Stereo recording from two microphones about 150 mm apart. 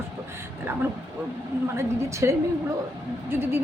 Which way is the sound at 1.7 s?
20° right (ahead or behind).